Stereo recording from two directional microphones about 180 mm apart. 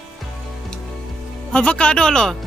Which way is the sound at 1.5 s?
5° left (ahead or behind).